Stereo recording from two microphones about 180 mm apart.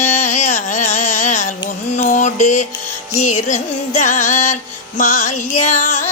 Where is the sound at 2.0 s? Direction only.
45° left (ahead or behind).